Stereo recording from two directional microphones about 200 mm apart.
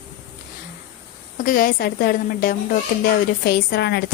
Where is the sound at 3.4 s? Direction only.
55° left (ahead or behind).